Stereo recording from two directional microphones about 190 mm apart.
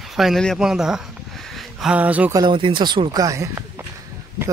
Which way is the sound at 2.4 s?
25° right (ahead or behind).